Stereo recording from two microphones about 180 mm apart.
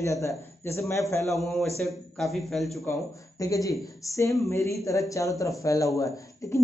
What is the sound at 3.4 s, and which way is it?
Speech, 20° left (ahead or behind).